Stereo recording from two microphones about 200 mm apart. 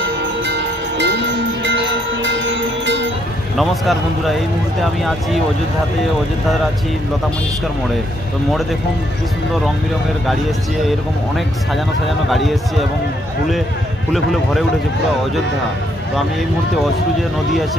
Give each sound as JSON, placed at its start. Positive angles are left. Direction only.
{"t": 0.5, "sound": "music", "side_deg": -60}
{"t": 3.5, "sound": "speech", "side_deg": 0}
{"t": 10.8, "sound": "speech", "side_deg": 0}
{"t": 14.1, "sound": "speech", "side_deg": 0}